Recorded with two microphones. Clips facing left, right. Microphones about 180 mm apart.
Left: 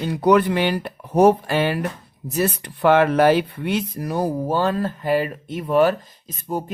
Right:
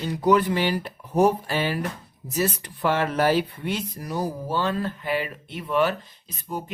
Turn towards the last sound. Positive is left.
turn(degrees=45)  # may be behind; listen again after turning